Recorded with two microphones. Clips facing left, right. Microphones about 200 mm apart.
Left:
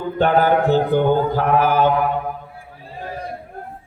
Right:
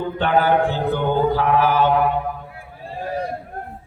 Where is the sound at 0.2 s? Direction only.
40° left (ahead or behind).